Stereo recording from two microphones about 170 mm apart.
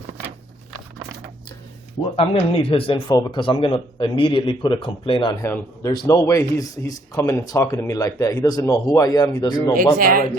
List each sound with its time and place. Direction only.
2.1 s a man's voice: 35° left (ahead or behind)
5.5 s a man's voice: 10° left (ahead or behind)
5.9 s a man's voice: 25° left (ahead or behind)
10.0 s speech: 60° right (ahead or behind)